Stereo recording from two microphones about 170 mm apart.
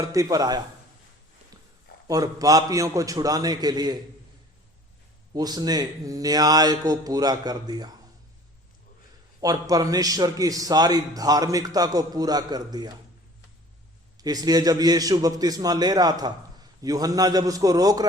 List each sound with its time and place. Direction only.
0.0 s a man's voice: 20° right (ahead or behind)
2.0 s a man's voice: 20° right (ahead or behind)
5.3 s a man's voice: 25° right (ahead or behind)
9.4 s a man's voice: 20° right (ahead or behind)
14.2 s a man's voice: 20° right (ahead or behind)